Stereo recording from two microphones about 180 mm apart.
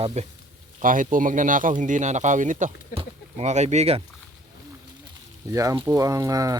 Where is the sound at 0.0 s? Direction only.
35° right (ahead or behind).